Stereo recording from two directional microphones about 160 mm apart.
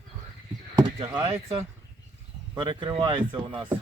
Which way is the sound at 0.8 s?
30° right (ahead or behind).